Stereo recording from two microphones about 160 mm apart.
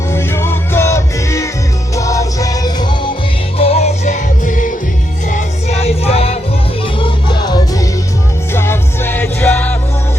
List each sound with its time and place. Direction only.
0.1 s music: 15° left (ahead or behind)
3.6 s music: 40° left (ahead or behind)
5.3 s music: 40° left (ahead or behind); by 9.7 s 10° left (ahead or behind)